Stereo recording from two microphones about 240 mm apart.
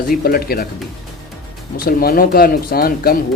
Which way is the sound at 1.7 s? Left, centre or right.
Left.